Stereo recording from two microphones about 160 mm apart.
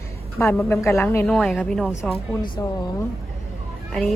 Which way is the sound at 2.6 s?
25° left (ahead or behind).